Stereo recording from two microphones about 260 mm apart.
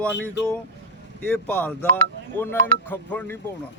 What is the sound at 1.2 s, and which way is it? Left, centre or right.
Speech, centre.